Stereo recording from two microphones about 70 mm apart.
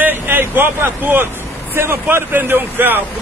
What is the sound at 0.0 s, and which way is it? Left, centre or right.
Speech, right.